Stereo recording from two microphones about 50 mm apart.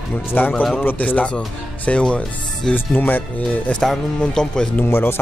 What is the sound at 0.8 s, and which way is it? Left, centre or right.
Speech, left.